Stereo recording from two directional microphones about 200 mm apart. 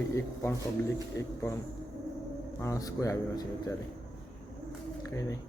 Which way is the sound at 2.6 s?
15° left (ahead or behind).